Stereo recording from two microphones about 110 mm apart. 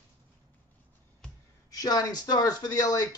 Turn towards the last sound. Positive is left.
turn(degrees=35)  # may be behind; listen again after turning